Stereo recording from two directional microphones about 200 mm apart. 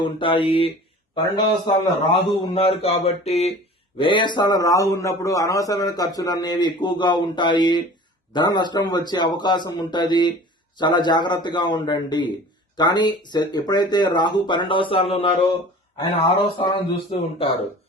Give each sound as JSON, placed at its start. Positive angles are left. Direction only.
{"t": 0.2, "sound": "a man's voice", "side_deg": 25}
{"t": 2.4, "sound": "mantra", "side_deg": 25}
{"t": 3.9, "sound": "a man's voice", "side_deg": 25}